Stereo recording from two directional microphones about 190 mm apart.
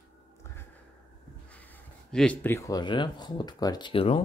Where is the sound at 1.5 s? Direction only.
10° left (ahead or behind).